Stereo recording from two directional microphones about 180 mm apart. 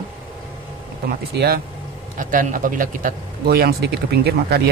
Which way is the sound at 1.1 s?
60° right (ahead or behind).